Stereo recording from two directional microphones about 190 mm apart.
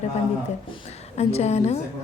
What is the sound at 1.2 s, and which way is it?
Speech, 35° left (ahead or behind).